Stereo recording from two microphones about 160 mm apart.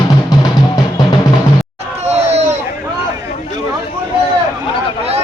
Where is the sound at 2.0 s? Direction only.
40° right (ahead or behind).